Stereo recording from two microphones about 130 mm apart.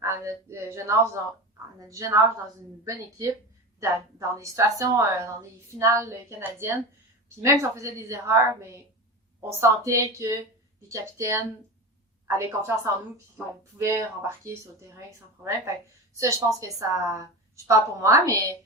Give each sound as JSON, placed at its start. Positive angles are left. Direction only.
{"t": 0.0, "sound": "a woman's voice", "side_deg": -20}
{"t": 12.4, "sound": "a woman's voice", "side_deg": -25}
{"t": 16.1, "sound": "a woman's voice", "side_deg": -25}